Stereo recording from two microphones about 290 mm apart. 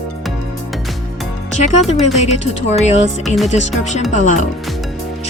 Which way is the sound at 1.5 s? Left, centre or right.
Left.